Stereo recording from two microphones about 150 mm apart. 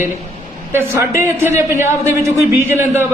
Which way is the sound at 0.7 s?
15° right (ahead or behind).